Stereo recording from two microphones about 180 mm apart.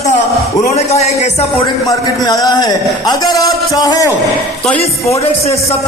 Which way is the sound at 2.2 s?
20° left (ahead or behind).